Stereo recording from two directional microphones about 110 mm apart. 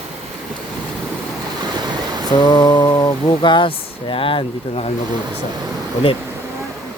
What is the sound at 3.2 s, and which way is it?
Speech, 45° left (ahead or behind).